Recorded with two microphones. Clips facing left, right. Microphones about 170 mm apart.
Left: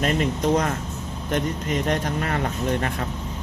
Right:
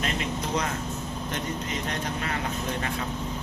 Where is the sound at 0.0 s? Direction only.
45° left (ahead or behind).